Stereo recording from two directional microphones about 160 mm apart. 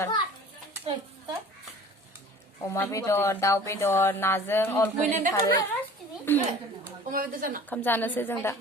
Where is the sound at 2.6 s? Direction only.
15° left (ahead or behind).